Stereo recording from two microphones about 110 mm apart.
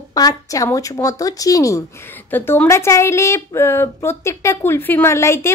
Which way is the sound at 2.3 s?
20° left (ahead or behind).